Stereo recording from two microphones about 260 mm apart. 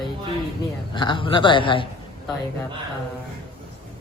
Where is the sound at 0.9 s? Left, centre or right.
Centre.